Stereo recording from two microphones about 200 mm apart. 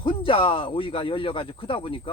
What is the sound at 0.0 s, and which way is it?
Speech, 25° left (ahead or behind).